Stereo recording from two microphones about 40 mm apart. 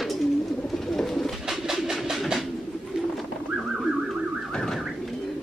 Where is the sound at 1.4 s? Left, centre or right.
Centre.